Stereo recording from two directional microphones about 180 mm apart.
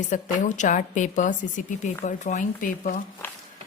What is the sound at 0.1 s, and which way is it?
A woman's voice, 45° left (ahead or behind).